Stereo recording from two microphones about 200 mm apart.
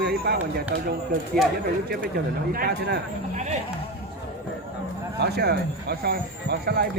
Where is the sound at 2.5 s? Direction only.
50° right (ahead or behind).